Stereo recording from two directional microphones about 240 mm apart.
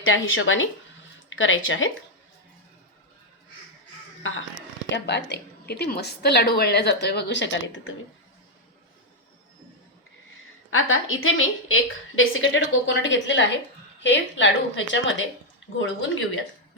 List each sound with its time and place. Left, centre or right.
0.0 s a woman's voice: left
4.2 s a woman's voice: left
10.7 s a woman's voice: left